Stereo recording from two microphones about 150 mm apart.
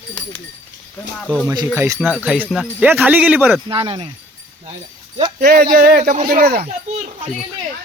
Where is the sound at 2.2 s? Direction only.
10° right (ahead or behind).